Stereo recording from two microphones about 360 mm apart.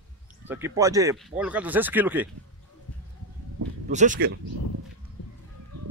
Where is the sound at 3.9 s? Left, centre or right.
Right.